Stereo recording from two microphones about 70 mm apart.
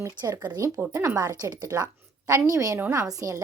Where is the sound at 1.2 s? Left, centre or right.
Right.